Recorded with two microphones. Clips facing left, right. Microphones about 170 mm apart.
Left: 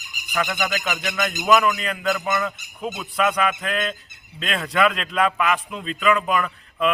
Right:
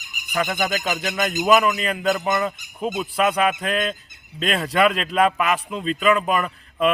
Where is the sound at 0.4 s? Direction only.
45° right (ahead or behind).